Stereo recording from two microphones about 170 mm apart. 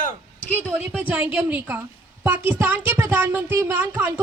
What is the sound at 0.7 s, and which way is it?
Speech, 10° right (ahead or behind).